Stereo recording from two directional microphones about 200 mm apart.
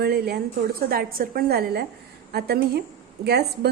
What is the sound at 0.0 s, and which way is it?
A woman's voice, 55° right (ahead or behind).